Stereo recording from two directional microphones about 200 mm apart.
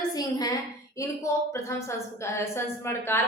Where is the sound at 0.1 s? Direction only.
20° left (ahead or behind).